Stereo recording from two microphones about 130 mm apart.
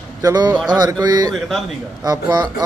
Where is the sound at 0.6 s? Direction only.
30° right (ahead or behind).